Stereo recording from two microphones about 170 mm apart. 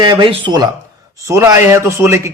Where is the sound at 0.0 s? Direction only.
25° right (ahead or behind).